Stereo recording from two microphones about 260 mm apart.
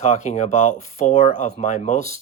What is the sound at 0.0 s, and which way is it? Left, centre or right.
Speech, left.